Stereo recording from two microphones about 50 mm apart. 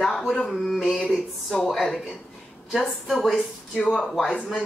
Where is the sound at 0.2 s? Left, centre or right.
Centre.